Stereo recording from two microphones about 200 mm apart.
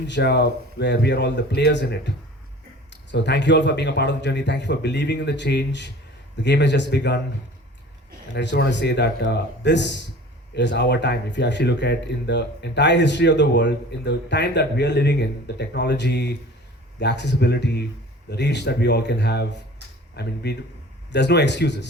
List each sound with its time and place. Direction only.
0.1 s speech: 60° left (ahead or behind)
8.3 s speech: 60° left (ahead or behind)